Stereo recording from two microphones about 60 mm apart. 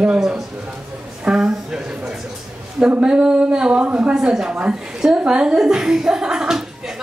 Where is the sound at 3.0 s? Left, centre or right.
Centre.